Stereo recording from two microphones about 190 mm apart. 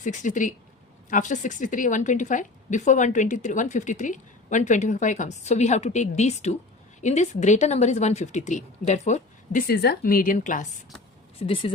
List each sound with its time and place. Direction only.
0.0 s a woman's voice: 40° left (ahead or behind)
11.3 s speech: 30° left (ahead or behind)